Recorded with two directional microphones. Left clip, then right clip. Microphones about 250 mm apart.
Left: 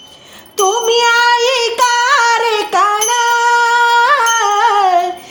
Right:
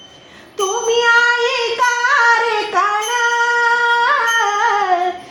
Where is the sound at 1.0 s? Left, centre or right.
Left.